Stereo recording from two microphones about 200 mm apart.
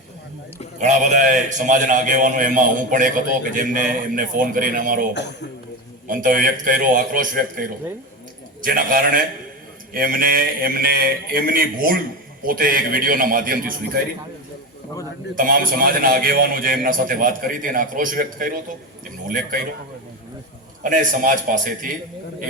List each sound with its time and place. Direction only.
0.8 s a man's voice: 35° right (ahead or behind)
6.1 s speech: 45° right (ahead or behind)
15.4 s speech: 45° right (ahead or behind)
20.8 s a man's voice: 40° right (ahead or behind)